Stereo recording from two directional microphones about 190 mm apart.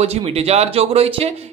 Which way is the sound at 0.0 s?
30° right (ahead or behind).